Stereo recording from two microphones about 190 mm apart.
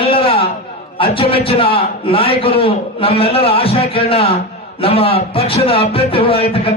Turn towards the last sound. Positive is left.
turn(degrees=30)  # may be behind; listen again after turning